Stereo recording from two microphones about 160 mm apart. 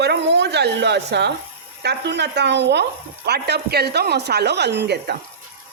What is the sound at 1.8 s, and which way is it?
Speech, 90° right.